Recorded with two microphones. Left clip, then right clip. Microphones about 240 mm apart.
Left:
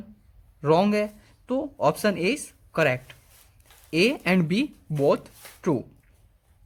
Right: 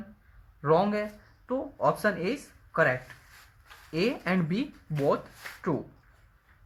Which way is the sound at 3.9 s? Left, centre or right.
Left.